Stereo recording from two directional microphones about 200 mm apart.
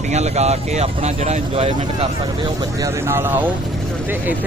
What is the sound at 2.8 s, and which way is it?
Speech, 10° right (ahead or behind).